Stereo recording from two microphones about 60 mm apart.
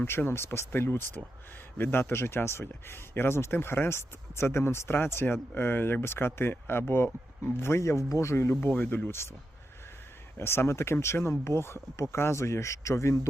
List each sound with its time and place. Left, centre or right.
0.0 s speech: left
8.6 s speech: left
10.3 s speech: left